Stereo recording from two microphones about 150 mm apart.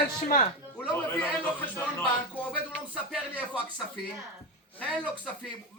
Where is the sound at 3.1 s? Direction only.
10° right (ahead or behind).